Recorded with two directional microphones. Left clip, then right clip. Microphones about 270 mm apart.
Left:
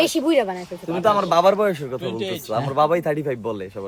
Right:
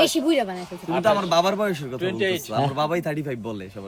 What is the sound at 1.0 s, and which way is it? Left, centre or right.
Speech, centre.